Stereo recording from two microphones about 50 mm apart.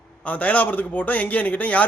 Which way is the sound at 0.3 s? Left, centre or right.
Left.